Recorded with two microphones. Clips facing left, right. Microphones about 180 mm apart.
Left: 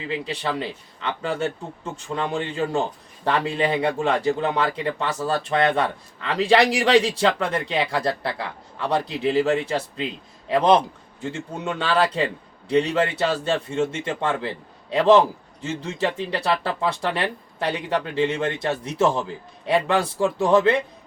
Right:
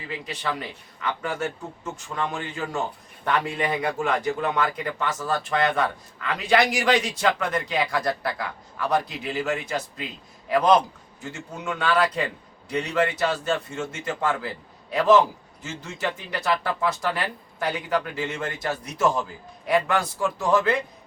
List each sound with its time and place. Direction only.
0.0 s speech: 30° left (ahead or behind)